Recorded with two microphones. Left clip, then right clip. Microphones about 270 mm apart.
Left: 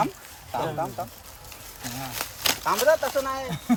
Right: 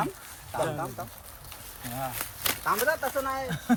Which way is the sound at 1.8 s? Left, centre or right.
Left.